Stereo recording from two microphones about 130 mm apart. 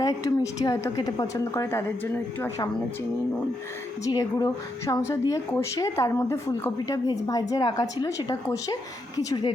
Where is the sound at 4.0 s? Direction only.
25° left (ahead or behind).